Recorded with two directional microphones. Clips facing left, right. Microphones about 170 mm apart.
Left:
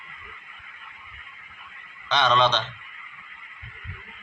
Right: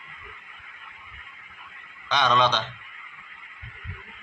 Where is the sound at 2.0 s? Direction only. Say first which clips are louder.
Left 1 dB; 10° right (ahead or behind).